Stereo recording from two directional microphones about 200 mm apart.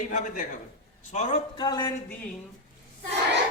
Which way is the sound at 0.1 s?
40° left (ahead or behind).